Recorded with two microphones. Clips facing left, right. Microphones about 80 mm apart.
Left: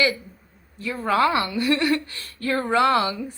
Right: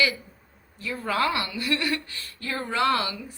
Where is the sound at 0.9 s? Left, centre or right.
Left.